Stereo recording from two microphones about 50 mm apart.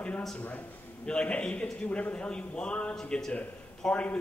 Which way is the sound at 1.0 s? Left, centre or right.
Left.